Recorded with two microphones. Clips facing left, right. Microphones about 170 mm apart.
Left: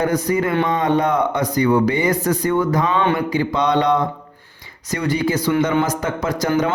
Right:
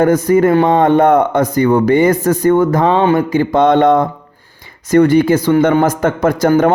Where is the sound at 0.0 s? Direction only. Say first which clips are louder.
Right 8 dB; 50° right (ahead or behind).